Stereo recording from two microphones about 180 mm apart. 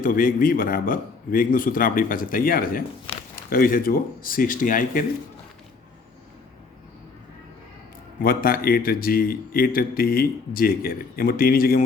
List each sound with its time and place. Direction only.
0.0 s a man's voice: 50° left (ahead or behind)
8.2 s speech: 55° left (ahead or behind)